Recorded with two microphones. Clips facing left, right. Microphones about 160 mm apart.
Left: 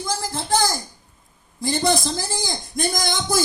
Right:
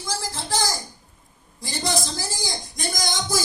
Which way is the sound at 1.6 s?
55° left (ahead or behind).